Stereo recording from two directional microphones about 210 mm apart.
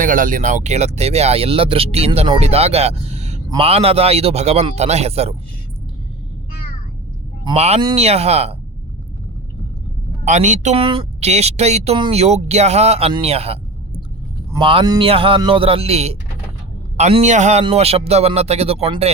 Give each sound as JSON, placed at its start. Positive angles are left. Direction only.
{"t": 0.0, "sound": "speech", "side_deg": -40}
{"t": 7.4, "sound": "speech", "side_deg": -30}
{"t": 10.2, "sound": "speech", "side_deg": -35}